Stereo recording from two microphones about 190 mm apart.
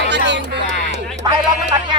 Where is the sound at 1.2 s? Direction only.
25° right (ahead or behind).